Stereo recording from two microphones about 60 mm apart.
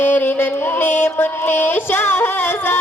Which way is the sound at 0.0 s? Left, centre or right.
Left.